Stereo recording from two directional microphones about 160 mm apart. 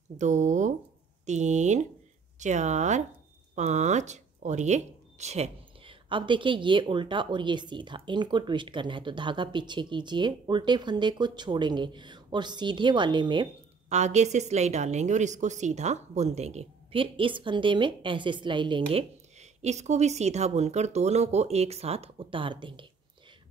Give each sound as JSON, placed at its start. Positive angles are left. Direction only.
{"t": 0.2, "sound": "a woman's voice", "side_deg": -50}
{"t": 13.8, "sound": "a woman's voice", "side_deg": -45}